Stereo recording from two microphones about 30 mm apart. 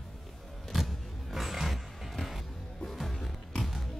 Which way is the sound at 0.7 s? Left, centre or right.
Centre.